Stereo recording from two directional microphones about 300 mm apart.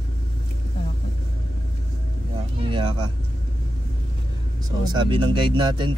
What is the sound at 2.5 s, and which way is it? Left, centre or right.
Speech, centre.